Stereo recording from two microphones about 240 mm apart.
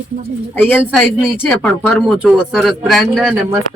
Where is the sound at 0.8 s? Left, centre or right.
Centre.